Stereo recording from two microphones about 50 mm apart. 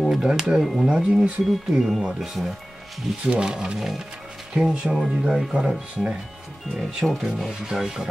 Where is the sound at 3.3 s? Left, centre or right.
Centre.